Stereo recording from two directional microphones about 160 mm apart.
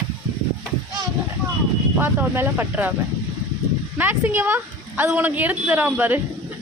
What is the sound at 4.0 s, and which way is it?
A woman's voice, 15° right (ahead or behind).